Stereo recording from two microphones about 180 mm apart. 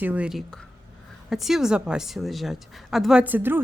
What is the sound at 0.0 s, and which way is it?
A woman's voice, 10° right (ahead or behind).